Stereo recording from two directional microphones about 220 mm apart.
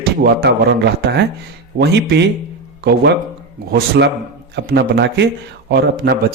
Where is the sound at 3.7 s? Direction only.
50° right (ahead or behind).